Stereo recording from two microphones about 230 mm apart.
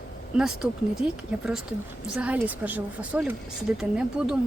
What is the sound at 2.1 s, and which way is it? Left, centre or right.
Speech, centre.